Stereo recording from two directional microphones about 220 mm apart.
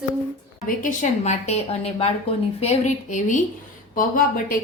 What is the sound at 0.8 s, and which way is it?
A woman's voice, 35° left (ahead or behind).